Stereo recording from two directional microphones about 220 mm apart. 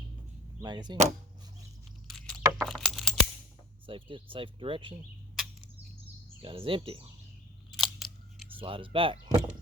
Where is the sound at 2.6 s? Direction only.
Centre (ahead or behind).